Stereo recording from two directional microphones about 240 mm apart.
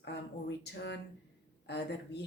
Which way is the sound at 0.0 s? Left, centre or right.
Left.